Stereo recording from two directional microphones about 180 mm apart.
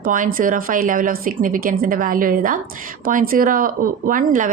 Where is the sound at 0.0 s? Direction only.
50° right (ahead or behind).